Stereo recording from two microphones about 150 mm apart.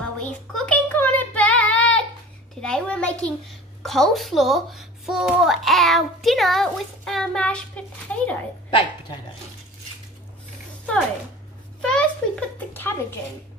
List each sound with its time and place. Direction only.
0.6 s child singing: 10° left (ahead or behind)
2.6 s a sound: 5° left (ahead or behind)
3.8 s a child's voice: centre (ahead or behind)
8.6 s a woman's voice: 35° left (ahead or behind)
11.8 s a woman's voice: 5° left (ahead or behind)